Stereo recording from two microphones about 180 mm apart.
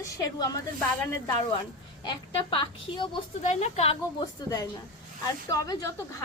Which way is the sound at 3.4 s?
40° left (ahead or behind).